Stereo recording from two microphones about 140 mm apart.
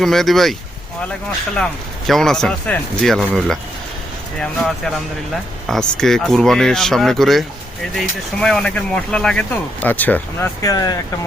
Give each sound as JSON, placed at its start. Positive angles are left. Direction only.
{"t": 0.0, "sound": "speech", "side_deg": 0}
{"t": 1.5, "sound": "speech", "side_deg": 5}
{"t": 10.6, "sound": "speech", "side_deg": 25}